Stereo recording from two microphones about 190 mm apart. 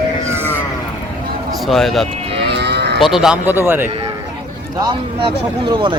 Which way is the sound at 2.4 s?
60° right (ahead or behind).